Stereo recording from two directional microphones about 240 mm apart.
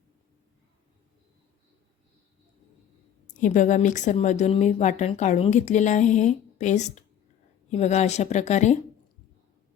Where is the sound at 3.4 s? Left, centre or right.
Left.